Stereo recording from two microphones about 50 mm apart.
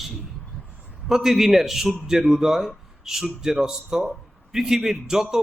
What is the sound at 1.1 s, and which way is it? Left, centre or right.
A man's voice, centre.